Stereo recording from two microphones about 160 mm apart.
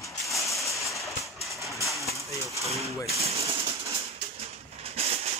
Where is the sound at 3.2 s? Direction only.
40° right (ahead or behind).